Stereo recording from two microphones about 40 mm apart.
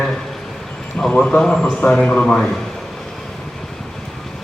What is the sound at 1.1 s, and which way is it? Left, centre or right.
A man's voice, left.